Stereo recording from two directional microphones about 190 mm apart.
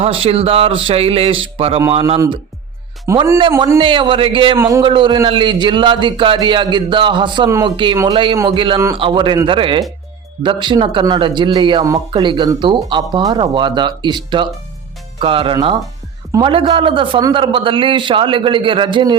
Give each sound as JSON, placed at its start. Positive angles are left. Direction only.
{"t": 0.0, "sound": "speech", "side_deg": -30}
{"t": 2.1, "sound": "speech", "side_deg": -15}
{"t": 3.6, "sound": "speech", "side_deg": -25}
{"t": 4.5, "sound": "speech", "side_deg": -15}
{"t": 4.8, "sound": "speech", "side_deg": -25}